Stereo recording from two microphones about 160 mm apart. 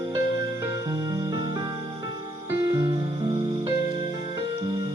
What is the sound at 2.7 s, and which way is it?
Music, 25° right (ahead or behind).